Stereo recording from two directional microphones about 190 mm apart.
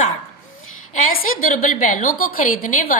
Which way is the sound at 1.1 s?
45° left (ahead or behind).